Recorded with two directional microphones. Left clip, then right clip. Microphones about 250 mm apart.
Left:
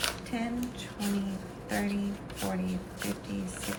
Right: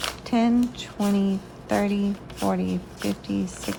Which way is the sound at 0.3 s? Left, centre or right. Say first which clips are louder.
Right 12 dB; centre.